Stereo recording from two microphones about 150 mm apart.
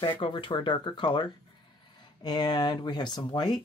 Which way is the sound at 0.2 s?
35° left (ahead or behind).